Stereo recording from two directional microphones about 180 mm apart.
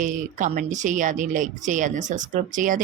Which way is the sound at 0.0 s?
45° right (ahead or behind).